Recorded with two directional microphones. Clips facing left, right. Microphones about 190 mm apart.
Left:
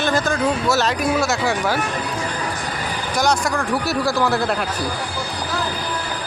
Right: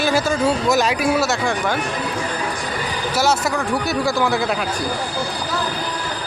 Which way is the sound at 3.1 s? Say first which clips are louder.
Even; 5° right (ahead or behind).